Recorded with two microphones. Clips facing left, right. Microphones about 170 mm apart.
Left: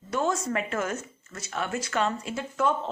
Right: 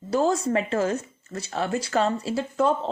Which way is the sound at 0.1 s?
35° right (ahead or behind).